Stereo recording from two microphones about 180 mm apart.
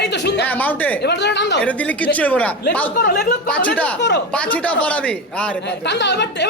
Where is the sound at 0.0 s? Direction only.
75° left (ahead or behind).